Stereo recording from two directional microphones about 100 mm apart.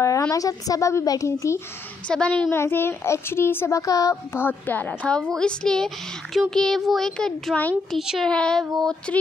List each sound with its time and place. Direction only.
0.0 s a woman's voice: 35° left (ahead or behind)
2.0 s speech: 10° left (ahead or behind)
2.5 s a child's voice: 25° left (ahead or behind); by 7.5 s 5° left (ahead or behind)
8.0 s speech: 5° right (ahead or behind)
8.3 s speech: 10° left (ahead or behind)